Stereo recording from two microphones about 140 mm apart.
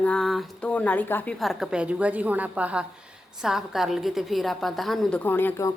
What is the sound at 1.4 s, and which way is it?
A woman's voice, centre (ahead or behind).